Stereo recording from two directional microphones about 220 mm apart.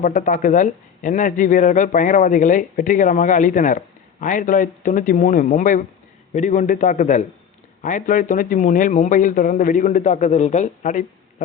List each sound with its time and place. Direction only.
0.0 s speech: 40° left (ahead or behind)